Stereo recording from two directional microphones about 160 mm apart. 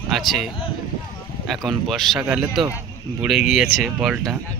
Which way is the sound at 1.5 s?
Centre (ahead or behind).